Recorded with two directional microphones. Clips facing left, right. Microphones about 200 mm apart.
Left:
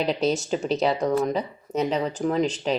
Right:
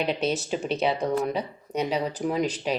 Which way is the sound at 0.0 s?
Centre (ahead or behind).